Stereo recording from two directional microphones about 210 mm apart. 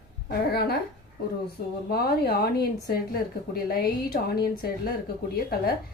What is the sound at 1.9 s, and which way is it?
A woman's voice, 45° left (ahead or behind).